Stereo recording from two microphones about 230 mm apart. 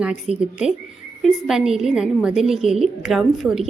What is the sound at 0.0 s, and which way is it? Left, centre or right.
A woman's voice, centre.